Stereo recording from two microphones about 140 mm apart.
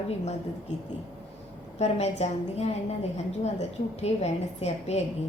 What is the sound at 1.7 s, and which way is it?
A woman's voice, 50° left (ahead or behind).